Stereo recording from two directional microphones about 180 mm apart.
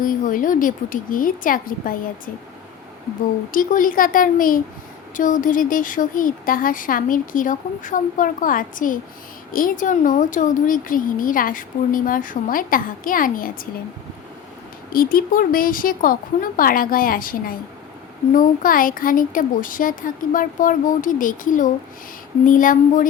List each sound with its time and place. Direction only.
0.0 s speech: 50° left (ahead or behind)
3.5 s speech: 50° left (ahead or behind)
14.9 s speech: 50° left (ahead or behind)